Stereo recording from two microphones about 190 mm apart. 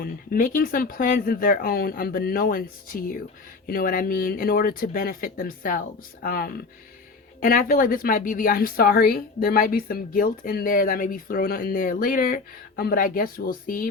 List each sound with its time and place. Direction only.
0.0 s a woman's voice: 45° left (ahead or behind)